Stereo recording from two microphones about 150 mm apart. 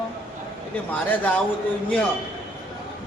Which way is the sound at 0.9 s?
10° left (ahead or behind).